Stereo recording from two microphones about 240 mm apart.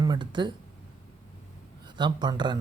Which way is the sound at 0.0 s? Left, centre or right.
Centre.